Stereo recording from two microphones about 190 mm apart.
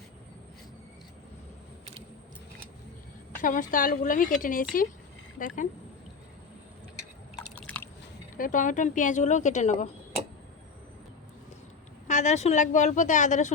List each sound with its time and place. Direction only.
3.4 s speech: 45° left (ahead or behind)
7.5 s a sound: 5° left (ahead or behind)
8.4 s a woman's voice: 45° left (ahead or behind)
12.0 s a woman's voice: 35° left (ahead or behind)